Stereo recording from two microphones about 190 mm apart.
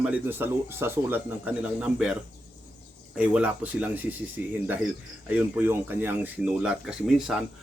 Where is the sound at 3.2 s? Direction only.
5° right (ahead or behind).